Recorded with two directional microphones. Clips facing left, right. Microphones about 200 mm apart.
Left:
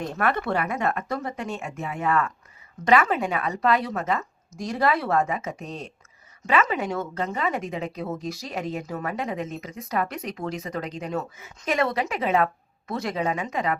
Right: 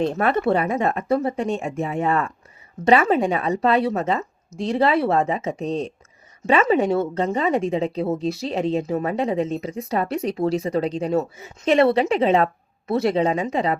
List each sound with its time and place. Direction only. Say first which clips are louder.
0.0 s a woman's voice: right 6 dB; 25° right (ahead or behind)